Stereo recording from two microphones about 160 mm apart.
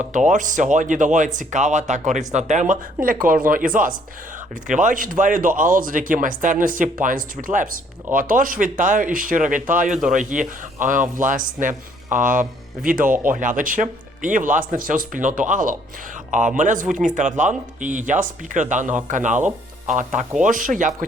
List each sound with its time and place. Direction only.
0.1 s speech: 50° right (ahead or behind)
20.4 s speech: 55° right (ahead or behind)